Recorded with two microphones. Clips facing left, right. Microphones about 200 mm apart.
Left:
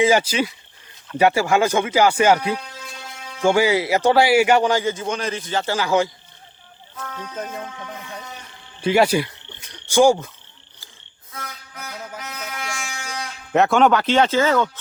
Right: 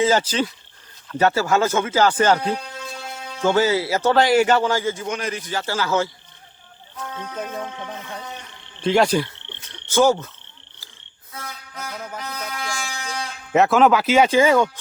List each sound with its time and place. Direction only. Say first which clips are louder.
0.0 s a man's voice: left 2 dB; 10° left (ahead or behind)
8.8 s speech: left 1 dB; 5° left (ahead or behind)
11.3 s music: right 1 dB; 35° right (ahead or behind)
13.5 s speech: even; centre (ahead or behind)